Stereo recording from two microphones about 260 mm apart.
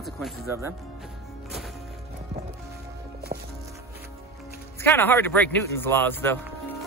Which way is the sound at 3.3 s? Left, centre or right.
Right.